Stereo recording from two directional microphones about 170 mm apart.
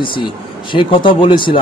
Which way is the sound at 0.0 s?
30° left (ahead or behind).